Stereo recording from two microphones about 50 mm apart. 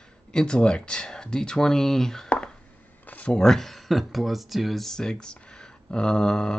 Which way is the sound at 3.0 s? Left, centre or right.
Left.